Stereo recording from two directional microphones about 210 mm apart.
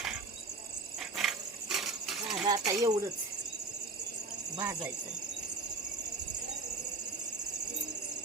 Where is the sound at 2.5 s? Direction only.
15° right (ahead or behind).